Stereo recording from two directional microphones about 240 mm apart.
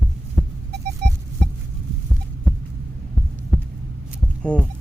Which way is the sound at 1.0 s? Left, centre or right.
Right.